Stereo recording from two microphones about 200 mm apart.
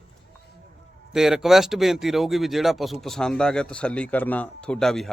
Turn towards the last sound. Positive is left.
turn(degrees=0)  # may be behind; listen again after turning